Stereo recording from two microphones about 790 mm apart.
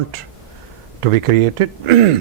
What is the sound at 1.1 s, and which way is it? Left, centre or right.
Speech, right.